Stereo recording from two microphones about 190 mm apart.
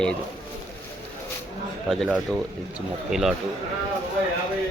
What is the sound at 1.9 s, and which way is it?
Speech, centre (ahead or behind).